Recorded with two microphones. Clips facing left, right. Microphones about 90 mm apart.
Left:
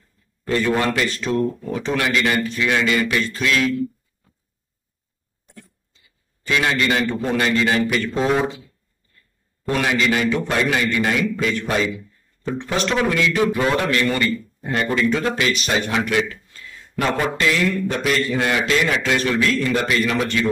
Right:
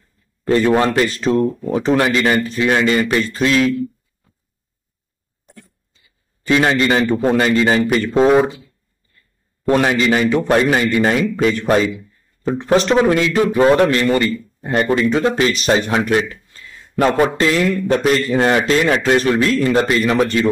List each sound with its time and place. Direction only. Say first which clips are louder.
0.5 s a man's voice: right 6 dB; 40° right (ahead or behind)
1.3 s speech: right 5 dB; 25° right (ahead or behind)
1.7 s a man's voice: right 6 dB; 35° right (ahead or behind)
6.4 s a man's voice: right 5 dB; 35° right (ahead or behind)
9.7 s a man's voice: right 5 dB; 40° right (ahead or behind)
17.4 s a man's voice: right 4 dB; 40° right (ahead or behind)